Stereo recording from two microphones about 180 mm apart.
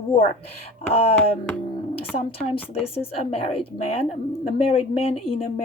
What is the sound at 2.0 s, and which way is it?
A woman's voice, 35° left (ahead or behind).